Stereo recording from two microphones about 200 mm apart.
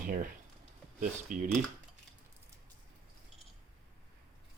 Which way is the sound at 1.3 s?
40° right (ahead or behind).